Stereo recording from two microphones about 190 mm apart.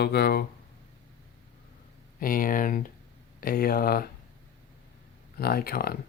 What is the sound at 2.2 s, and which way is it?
Speech, 50° left (ahead or behind).